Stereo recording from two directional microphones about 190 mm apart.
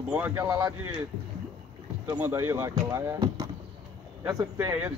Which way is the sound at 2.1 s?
15° right (ahead or behind).